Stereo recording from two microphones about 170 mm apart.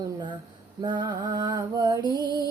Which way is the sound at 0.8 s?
25° right (ahead or behind).